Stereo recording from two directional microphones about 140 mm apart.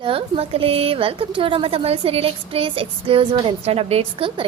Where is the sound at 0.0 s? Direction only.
40° right (ahead or behind).